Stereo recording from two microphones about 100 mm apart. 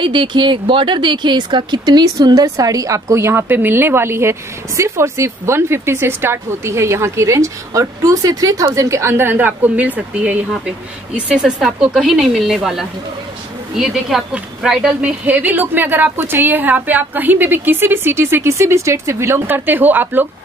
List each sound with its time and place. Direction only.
0.0 s a woman's voice: 55° right (ahead or behind); by 20.2 s 20° right (ahead or behind)